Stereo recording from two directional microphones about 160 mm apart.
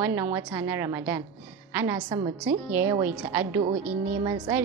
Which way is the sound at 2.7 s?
15° right (ahead or behind).